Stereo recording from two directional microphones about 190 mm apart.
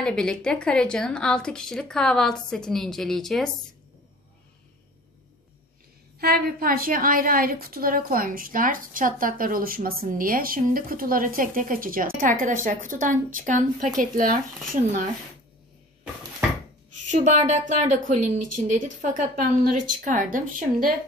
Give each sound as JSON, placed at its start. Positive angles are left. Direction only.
{"t": 0.0, "sound": "a woman's voice", "side_deg": 5}
{"t": 6.1, "sound": "a woman's voice", "side_deg": -50}
{"t": 17.1, "sound": "a woman's voice", "side_deg": -40}